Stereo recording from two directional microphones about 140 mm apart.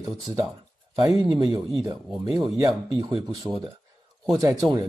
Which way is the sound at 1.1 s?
35° right (ahead or behind).